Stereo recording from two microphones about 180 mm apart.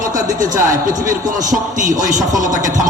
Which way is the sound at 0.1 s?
20° right (ahead or behind).